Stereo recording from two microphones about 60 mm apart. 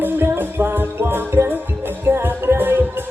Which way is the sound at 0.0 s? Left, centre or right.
Right.